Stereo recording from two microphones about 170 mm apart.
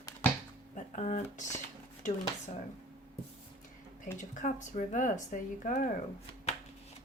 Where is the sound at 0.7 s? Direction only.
45° left (ahead or behind).